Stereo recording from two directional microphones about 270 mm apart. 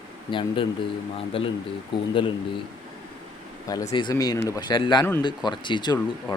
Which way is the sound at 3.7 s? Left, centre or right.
Centre.